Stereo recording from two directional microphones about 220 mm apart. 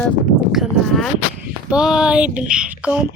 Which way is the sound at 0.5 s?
Centre (ahead or behind).